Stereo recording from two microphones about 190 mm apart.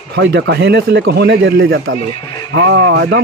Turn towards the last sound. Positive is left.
turn(degrees=-65)  # may be behind; listen again after turning